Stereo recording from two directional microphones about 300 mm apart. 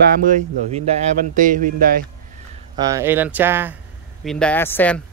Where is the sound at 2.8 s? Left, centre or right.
Centre.